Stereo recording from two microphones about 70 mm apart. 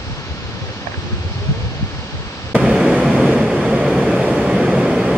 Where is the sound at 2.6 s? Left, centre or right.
Centre.